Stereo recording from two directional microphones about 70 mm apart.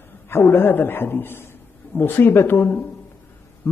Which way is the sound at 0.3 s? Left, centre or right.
Left.